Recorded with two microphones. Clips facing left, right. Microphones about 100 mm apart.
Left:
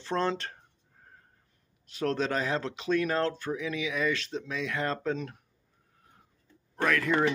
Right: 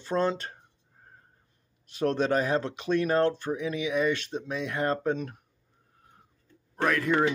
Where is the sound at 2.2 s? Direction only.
35° right (ahead or behind).